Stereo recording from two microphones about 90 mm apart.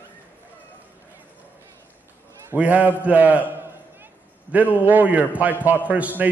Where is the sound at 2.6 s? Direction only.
15° right (ahead or behind).